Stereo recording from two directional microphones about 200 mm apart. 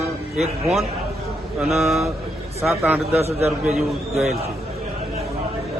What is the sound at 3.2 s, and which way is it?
Speech, 30° right (ahead or behind).